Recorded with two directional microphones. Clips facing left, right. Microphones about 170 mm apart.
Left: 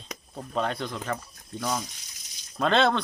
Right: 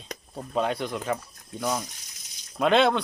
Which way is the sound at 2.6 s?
10° right (ahead or behind).